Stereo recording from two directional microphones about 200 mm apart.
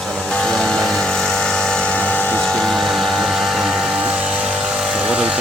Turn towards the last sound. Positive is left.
turn(degrees=-5)  # may be behind; listen again after turning